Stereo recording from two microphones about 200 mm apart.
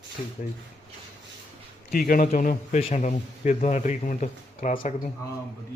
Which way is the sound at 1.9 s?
45° left (ahead or behind).